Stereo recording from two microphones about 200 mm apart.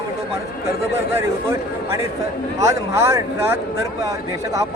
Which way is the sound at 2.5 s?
15° right (ahead or behind).